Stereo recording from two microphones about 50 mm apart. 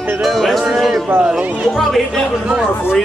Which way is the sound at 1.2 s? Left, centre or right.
Right.